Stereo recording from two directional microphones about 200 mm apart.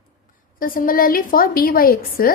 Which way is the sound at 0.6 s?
45° left (ahead or behind).